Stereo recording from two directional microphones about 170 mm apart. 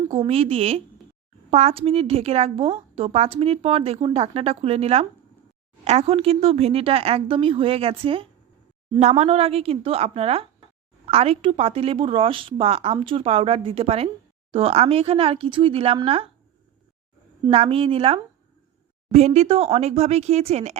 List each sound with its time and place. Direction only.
0.1 s a woman's voice: 35° right (ahead or behind)
17.4 s a woman's voice: 35° right (ahead or behind)